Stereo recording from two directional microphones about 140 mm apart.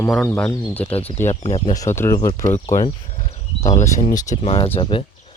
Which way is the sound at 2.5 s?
65° left (ahead or behind).